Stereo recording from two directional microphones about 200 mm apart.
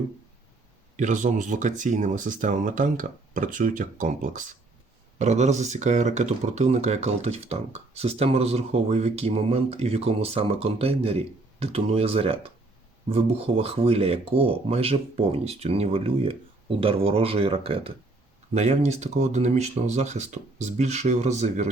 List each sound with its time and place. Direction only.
0.9 s speech: 40° right (ahead or behind)